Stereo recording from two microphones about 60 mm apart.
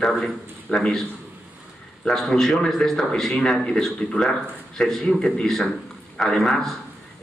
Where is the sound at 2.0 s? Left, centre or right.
Centre.